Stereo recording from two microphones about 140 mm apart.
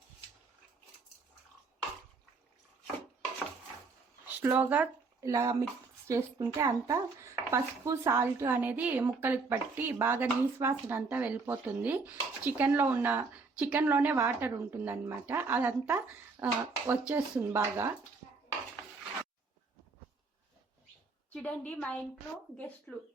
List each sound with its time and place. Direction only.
4.4 s speech: 15° right (ahead or behind)
21.2 s a woman's voice: 10° left (ahead or behind)